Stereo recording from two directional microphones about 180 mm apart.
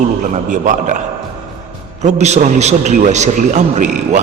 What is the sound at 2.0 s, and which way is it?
A man's voice, 40° right (ahead or behind).